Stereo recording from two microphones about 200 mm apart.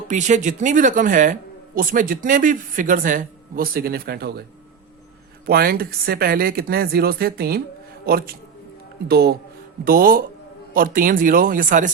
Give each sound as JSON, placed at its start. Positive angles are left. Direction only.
{"t": 0.1, "sound": "speech", "side_deg": -40}
{"t": 5.5, "sound": "speech", "side_deg": -50}